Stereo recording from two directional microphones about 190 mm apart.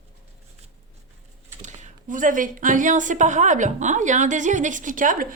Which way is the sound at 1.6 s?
40° right (ahead or behind).